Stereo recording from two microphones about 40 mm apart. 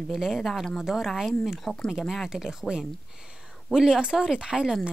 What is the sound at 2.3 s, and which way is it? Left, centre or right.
Speech, centre.